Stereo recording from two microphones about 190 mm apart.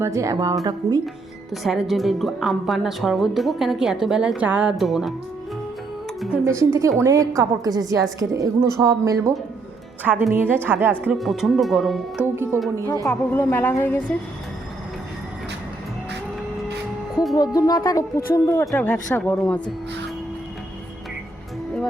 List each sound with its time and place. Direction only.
0.0 s a woman's voice: 15° right (ahead or behind)
1.6 s speech: centre (ahead or behind)
6.4 s a woman's voice: 15° right (ahead or behind)
12.9 s a woman's voice: 15° left (ahead or behind)
17.3 s a woman's voice: 20° left (ahead or behind)